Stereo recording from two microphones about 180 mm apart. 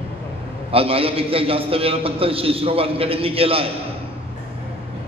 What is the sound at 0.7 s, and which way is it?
A man's voice, 30° right (ahead or behind).